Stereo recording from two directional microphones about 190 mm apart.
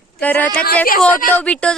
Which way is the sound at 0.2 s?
10° left (ahead or behind).